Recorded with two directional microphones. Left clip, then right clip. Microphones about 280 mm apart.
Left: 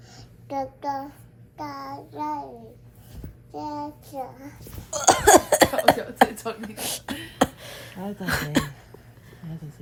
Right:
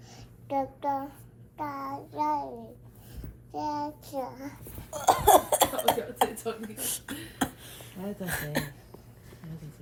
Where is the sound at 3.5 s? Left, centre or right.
Centre.